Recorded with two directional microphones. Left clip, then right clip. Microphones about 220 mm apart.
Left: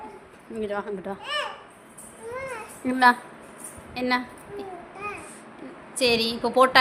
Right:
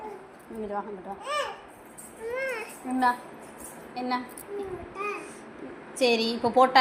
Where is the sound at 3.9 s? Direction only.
25° left (ahead or behind).